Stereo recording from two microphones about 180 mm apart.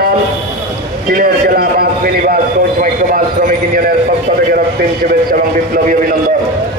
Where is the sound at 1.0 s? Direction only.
55° right (ahead or behind).